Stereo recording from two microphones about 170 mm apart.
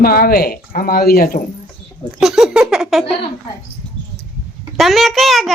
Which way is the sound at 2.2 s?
Centre (ahead or behind).